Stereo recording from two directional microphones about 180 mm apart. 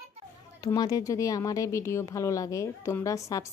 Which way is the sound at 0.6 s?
20° left (ahead or behind).